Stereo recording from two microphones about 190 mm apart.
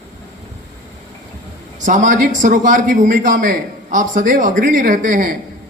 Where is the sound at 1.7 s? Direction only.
40° right (ahead or behind).